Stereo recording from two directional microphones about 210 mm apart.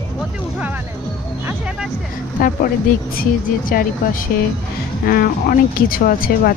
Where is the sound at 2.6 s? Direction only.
45° left (ahead or behind).